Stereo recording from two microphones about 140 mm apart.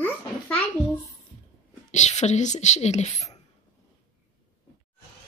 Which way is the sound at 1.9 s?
55° left (ahead or behind).